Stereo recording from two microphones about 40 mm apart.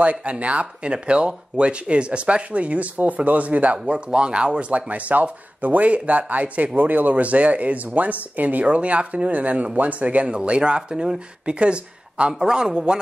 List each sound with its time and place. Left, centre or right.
0.0 s speech: right
3.8 s speech: right